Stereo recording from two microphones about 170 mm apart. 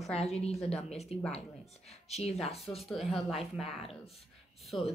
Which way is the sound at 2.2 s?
35° left (ahead or behind).